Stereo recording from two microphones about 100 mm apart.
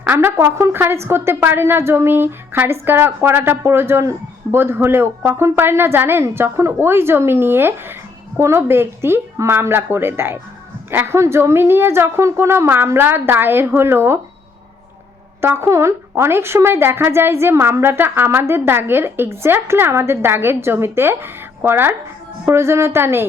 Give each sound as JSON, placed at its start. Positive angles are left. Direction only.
{"t": 0.1, "sound": "a woman's voice", "side_deg": -20}
{"t": 15.4, "sound": "a woman's voice", "side_deg": -25}